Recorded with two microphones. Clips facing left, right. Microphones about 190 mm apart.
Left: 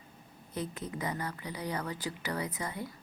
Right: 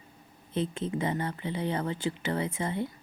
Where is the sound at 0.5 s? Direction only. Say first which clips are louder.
Right 7 dB; 25° right (ahead or behind).